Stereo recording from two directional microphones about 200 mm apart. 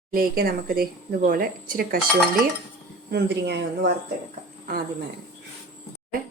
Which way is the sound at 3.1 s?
55° right (ahead or behind).